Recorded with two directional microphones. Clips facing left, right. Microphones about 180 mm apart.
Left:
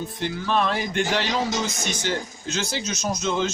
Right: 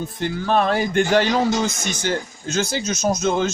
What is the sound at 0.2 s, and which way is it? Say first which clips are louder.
Speech: right 4 dB; 45° right (ahead or behind).